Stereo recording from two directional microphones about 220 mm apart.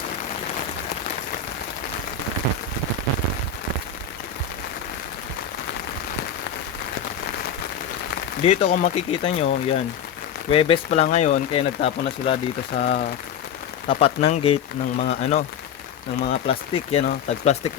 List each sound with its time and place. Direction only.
8.4 s speech: 30° left (ahead or behind)
10.5 s speech: 25° left (ahead or behind)